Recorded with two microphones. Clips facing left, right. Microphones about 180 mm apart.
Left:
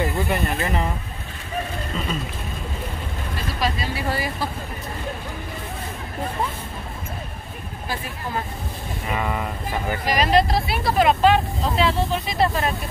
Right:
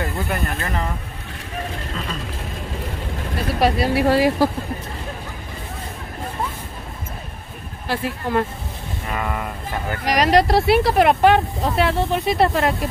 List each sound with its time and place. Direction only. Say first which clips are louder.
0.0 s speech: left 2 dB; centre (ahead or behind)
3.5 s speech: right 9 dB; 65° right (ahead or behind)
7.9 s speech: right 7 dB; 75° right (ahead or behind)
9.1 s speech: even; centre (ahead or behind)
10.0 s speech: right 3 dB; 75° right (ahead or behind)